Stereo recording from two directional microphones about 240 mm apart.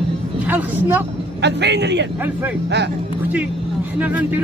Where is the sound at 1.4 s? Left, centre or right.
Right.